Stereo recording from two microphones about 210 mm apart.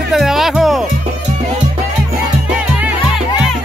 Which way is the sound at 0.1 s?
Centre (ahead or behind).